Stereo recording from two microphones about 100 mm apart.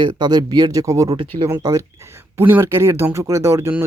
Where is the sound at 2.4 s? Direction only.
25° right (ahead or behind).